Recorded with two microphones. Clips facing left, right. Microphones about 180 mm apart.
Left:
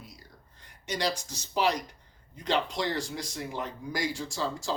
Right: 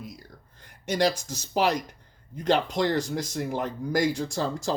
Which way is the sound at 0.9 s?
50° right (ahead or behind).